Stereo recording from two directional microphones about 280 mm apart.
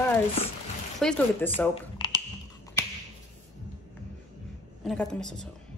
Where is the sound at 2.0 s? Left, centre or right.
Centre.